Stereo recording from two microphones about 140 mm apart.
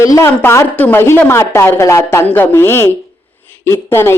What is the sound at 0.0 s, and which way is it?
A woman's voice, 20° left (ahead or behind).